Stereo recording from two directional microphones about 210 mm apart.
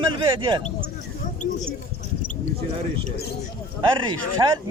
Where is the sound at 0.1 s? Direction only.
25° right (ahead or behind).